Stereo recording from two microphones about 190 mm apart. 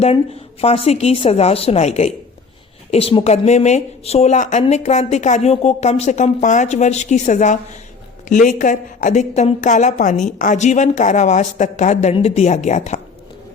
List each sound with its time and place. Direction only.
0.0 s a woman's voice: 30° left (ahead or behind)